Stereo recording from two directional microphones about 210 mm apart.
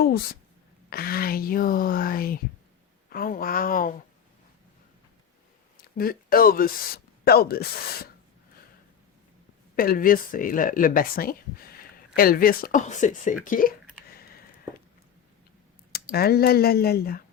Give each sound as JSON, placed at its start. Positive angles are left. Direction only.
{"t": 0.9, "sound": "speech", "side_deg": 45}
{"t": 5.7, "sound": "speech", "side_deg": 45}
{"t": 9.7, "sound": "speech", "side_deg": 45}
{"t": 14.1, "sound": "a sound", "side_deg": 45}
{"t": 15.9, "sound": "speech", "side_deg": 45}